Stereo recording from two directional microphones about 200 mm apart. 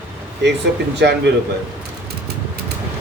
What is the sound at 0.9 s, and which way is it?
Speech, 60° right (ahead or behind).